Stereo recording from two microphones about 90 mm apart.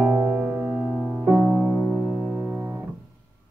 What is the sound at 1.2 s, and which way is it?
Music, 20° right (ahead or behind).